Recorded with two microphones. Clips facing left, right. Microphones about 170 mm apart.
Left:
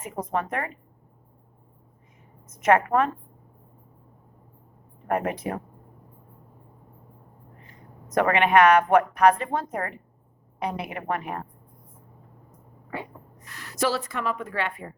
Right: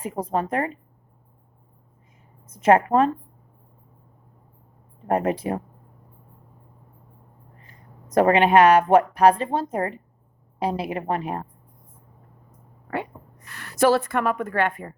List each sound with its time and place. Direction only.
0.0 s a woman's voice: 30° right (ahead or behind)
2.5 s a woman's voice: 30° right (ahead or behind)
5.0 s a woman's voice: 30° right (ahead or behind)
7.6 s a woman's voice: 35° right (ahead or behind)
12.5 s a sound: 65° right (ahead or behind)